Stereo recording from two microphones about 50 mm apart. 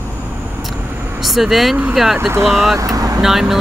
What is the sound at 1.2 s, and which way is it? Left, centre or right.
Speech, centre.